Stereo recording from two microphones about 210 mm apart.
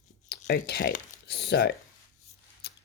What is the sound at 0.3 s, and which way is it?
Speech, 50° left (ahead or behind).